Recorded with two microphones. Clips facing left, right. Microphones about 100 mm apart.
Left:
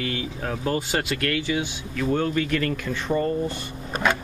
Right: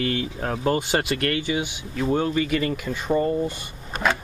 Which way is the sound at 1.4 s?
20° right (ahead or behind).